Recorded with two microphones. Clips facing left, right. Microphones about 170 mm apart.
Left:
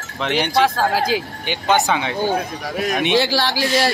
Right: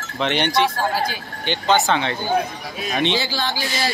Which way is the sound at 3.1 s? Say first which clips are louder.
Left 6 dB; 80° left.